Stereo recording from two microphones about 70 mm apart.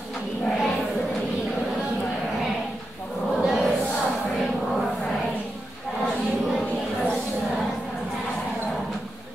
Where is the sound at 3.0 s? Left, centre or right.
Centre.